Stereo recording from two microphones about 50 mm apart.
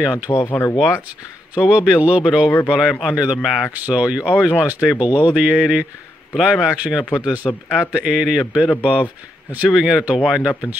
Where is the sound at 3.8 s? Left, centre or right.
Right.